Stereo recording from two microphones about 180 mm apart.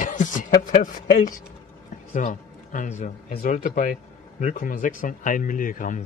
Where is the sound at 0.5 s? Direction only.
50° left (ahead or behind).